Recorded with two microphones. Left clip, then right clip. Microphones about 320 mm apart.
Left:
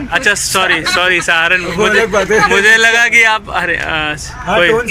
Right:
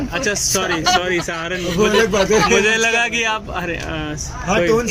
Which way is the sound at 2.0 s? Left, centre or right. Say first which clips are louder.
Left 4 dB; left.